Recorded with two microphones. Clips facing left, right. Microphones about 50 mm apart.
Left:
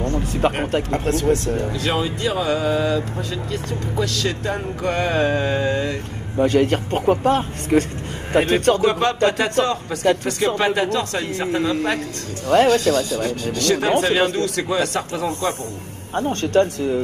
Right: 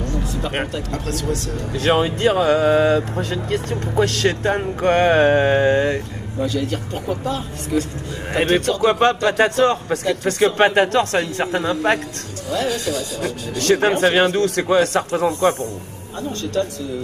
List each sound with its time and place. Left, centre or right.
0.0 s a sound: left
0.9 s speech: left
1.7 s a man's voice: right
6.3 s speech: left
8.3 s a man's voice: right
12.4 s speech: left
12.8 s speech: centre
13.6 s speech: right
16.2 s speech: left